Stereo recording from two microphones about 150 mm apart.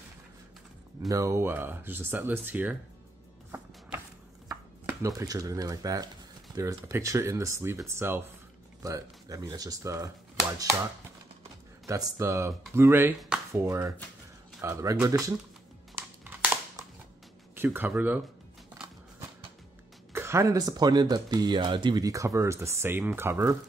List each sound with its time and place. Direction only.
1.0 s speech: 20° right (ahead or behind)
4.8 s speech: 20° right (ahead or behind)
16.0 s crumpling: 10° right (ahead or behind)
17.6 s speech: 10° right (ahead or behind)
20.1 s speech: 20° right (ahead or behind)